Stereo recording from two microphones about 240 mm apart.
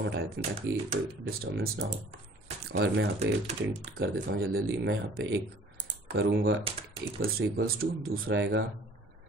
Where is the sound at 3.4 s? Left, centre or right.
Right.